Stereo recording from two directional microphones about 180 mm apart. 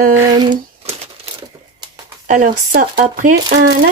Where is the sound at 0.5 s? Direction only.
35° right (ahead or behind).